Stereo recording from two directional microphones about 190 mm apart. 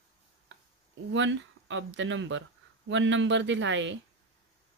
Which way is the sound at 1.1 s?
70° right (ahead or behind).